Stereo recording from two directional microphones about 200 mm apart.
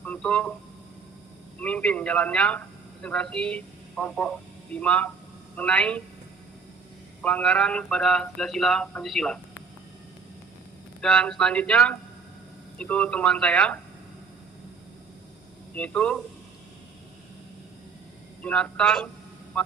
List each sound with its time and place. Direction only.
0.0 s a sound: 5° left (ahead or behind)
1.5 s a man's voice: 5° left (ahead or behind)
7.2 s speech: 5° left (ahead or behind)
11.0 s speech: 5° left (ahead or behind)
15.7 s speech: 5° left (ahead or behind)
18.4 s speech: 5° left (ahead or behind)